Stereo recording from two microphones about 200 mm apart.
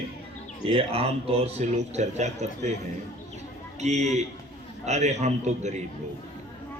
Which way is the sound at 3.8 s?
35° right (ahead or behind).